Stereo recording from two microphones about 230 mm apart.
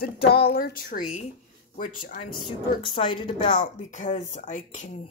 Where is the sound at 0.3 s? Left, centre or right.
Left.